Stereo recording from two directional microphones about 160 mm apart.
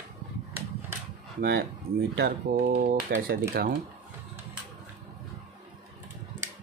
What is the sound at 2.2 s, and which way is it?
Speech, 70° right (ahead or behind).